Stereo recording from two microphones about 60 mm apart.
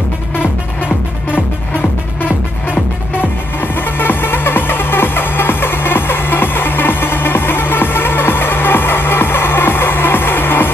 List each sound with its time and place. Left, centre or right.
2.2 s music: left